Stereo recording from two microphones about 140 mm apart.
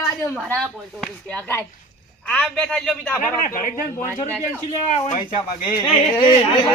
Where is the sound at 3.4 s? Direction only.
80° left.